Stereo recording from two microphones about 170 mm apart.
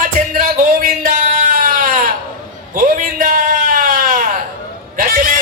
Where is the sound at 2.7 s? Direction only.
55° right (ahead or behind).